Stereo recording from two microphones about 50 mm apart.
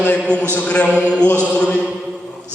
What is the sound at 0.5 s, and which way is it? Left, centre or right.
Speech, left.